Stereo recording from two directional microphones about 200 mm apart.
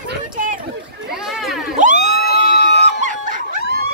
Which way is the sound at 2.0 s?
55° left (ahead or behind).